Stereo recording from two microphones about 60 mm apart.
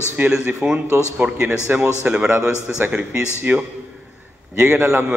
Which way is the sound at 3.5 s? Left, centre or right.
Right.